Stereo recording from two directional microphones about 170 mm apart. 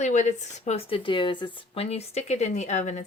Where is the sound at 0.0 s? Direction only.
45° left (ahead or behind).